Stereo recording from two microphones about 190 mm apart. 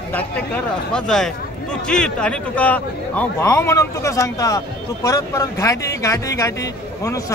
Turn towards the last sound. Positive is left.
turn(degrees=15)  # may be behind; listen again after turning